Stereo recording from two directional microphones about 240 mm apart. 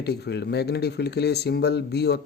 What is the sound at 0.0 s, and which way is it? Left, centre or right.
Speech, left.